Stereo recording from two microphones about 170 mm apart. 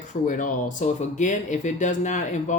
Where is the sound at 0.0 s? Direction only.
50° left (ahead or behind).